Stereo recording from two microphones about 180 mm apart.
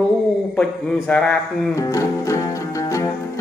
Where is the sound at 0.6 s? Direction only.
5° left (ahead or behind).